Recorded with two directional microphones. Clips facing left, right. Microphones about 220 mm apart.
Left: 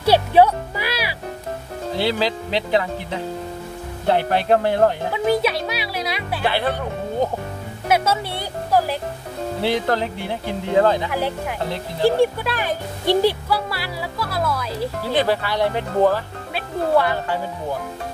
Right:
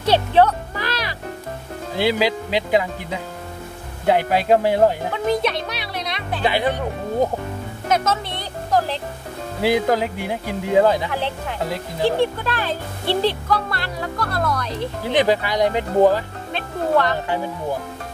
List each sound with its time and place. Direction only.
0.0 s music: 10° left (ahead or behind)
2.0 s speech: 10° right (ahead or behind)
5.1 s speech: 5° left (ahead or behind)
6.4 s speech: 15° right (ahead or behind)
7.9 s speech: 10° left (ahead or behind)
9.6 s speech: 10° right (ahead or behind)
11.1 s speech: 10° left (ahead or behind)
15.1 s speech: 15° right (ahead or behind)
16.5 s speech: 10° left (ahead or behind)